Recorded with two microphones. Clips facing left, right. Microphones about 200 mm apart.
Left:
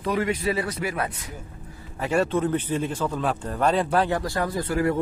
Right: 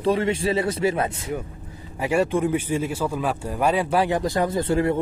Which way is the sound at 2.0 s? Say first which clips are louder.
Right 2 dB; 10° right (ahead or behind).